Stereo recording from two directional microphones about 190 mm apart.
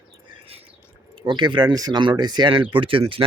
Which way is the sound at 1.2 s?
25° right (ahead or behind).